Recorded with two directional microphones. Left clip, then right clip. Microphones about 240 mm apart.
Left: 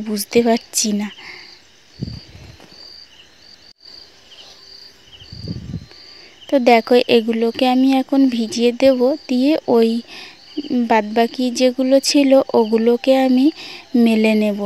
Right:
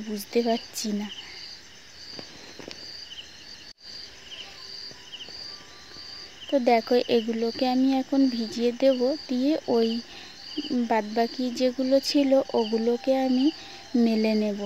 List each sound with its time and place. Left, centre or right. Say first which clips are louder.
0.1 s speech: left 10 dB; left
6.5 s speech: left 9 dB; left